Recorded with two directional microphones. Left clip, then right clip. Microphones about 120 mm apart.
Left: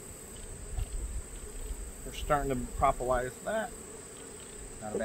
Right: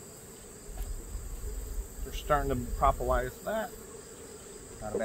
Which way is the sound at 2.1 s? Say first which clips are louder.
Right 1 dB; 15° right (ahead or behind).